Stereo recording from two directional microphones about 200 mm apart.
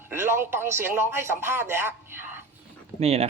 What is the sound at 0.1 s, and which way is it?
A man's voice, 10° right (ahead or behind).